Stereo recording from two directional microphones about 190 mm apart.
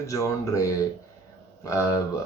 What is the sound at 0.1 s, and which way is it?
Speech, 15° left (ahead or behind).